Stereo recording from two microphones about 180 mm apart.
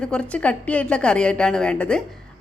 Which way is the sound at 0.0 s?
5° left (ahead or behind).